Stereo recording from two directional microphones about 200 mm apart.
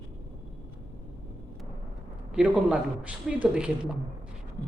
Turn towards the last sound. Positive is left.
turn(degrees=-5)  # may be behind; listen again after turning